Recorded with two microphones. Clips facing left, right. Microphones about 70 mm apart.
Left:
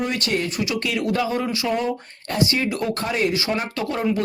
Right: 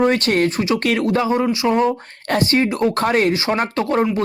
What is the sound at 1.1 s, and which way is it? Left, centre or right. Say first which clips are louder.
Speech: right 5 dB; right.